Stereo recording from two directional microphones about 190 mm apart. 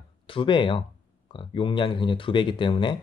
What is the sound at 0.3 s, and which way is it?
Speech, 25° left (ahead or behind).